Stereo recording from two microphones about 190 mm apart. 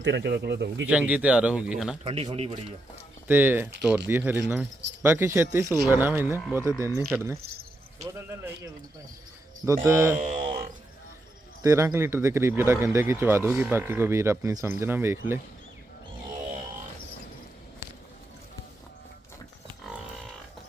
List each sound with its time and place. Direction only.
0.0 s speech: 65° right (ahead or behind)
0.9 s speech: 5° right (ahead or behind)
2.0 s a man's voice: 30° right (ahead or behind)
3.2 s speech: 10° right (ahead or behind)
9.6 s speech: 15° right (ahead or behind)
10.2 s speech: 40° right (ahead or behind)
11.6 s speech: 15° right (ahead or behind)